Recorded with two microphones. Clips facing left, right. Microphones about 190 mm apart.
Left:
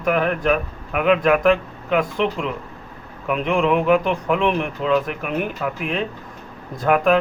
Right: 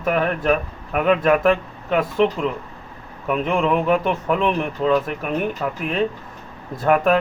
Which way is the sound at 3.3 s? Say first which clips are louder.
Left 1 dB; centre (ahead or behind).